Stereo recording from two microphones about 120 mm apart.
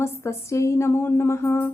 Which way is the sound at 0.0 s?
20° left (ahead or behind).